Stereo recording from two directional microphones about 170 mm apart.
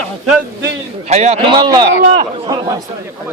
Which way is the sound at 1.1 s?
40° right (ahead or behind).